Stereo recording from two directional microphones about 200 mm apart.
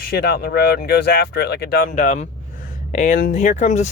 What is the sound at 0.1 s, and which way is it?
Speech, 50° left (ahead or behind).